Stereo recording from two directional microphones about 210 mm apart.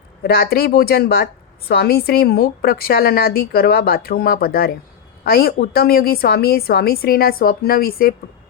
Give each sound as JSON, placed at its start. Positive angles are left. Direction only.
{"t": 0.2, "sound": "a woman's voice", "side_deg": 50}